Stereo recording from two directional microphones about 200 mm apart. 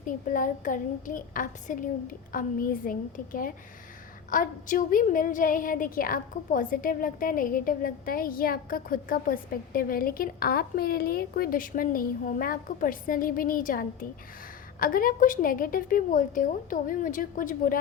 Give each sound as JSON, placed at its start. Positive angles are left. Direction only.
{"t": 0.0, "sound": "a woman's voice", "side_deg": 40}